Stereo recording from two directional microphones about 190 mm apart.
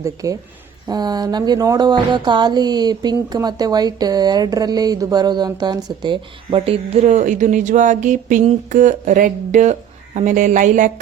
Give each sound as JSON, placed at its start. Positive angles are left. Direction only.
{"t": 0.0, "sound": "speech", "side_deg": -15}
{"t": 0.9, "sound": "music", "side_deg": -20}
{"t": 10.2, "sound": "a woman's voice", "side_deg": -40}